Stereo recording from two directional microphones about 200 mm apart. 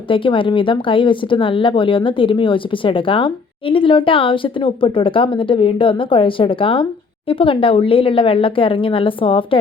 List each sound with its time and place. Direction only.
0.1 s speech: 25° left (ahead or behind)